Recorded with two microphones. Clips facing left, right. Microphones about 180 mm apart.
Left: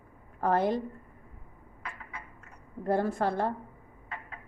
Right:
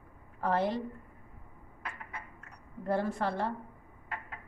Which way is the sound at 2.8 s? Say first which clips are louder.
Left 3 dB; 45° left (ahead or behind).